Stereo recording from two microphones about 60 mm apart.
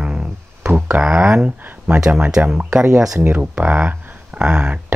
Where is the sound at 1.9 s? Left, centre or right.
Centre; by 4.2 s right.